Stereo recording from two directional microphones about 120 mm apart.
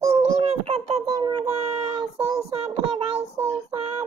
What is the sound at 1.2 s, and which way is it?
Child singing, 35° right (ahead or behind).